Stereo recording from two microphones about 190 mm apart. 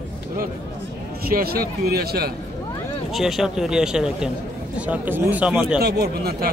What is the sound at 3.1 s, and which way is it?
A man's voice, centre (ahead or behind).